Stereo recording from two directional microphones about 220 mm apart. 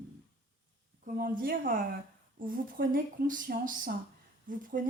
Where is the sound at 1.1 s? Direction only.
40° right (ahead or behind).